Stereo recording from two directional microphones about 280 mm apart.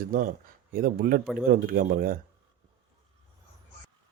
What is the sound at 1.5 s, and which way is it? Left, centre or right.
Speech, right.